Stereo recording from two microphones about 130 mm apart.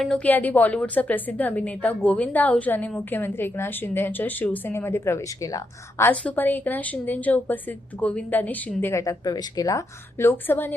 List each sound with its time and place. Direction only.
0.0 s a woman's voice: 10° left (ahead or behind); by 6.1 s 25° left (ahead or behind)
6.1 s a woman's voice: 15° left (ahead or behind)